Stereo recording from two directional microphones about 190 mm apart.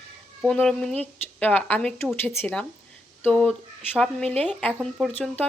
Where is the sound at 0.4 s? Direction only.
5° left (ahead or behind).